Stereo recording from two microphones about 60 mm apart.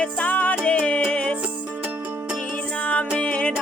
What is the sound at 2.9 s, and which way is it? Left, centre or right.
Music, left.